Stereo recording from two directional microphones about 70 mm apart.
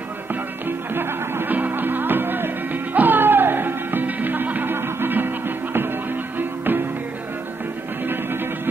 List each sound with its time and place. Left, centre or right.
0.3 s music: right